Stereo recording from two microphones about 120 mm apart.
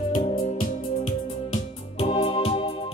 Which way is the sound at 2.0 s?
50° left (ahead or behind).